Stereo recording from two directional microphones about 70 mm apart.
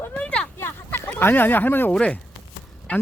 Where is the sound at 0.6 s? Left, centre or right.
Left.